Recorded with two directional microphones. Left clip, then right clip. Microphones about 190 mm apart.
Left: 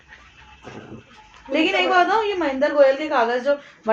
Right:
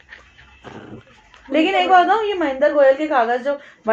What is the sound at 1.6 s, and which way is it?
A woman's voice, 40° right (ahead or behind).